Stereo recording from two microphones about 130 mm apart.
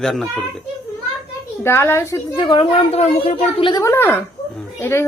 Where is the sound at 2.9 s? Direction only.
55° left (ahead or behind).